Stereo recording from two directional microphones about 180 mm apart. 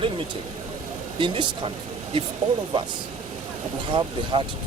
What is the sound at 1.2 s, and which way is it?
Speech, 30° right (ahead or behind).